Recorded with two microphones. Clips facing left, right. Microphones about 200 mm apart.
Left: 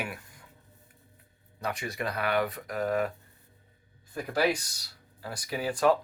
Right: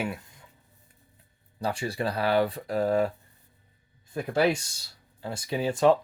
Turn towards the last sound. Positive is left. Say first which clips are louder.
# right 3 dB
turn(degrees=-25)  # may be behind; listen again after turning